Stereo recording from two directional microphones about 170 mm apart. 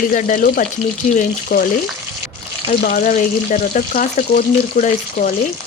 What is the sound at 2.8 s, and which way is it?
Frying, 55° left (ahead or behind).